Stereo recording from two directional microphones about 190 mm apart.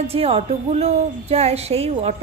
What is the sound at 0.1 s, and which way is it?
A woman's voice, 30° right (ahead or behind).